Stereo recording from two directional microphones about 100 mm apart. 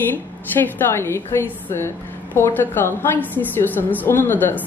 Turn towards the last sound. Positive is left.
turn(degrees=20)  # may be behind; listen again after turning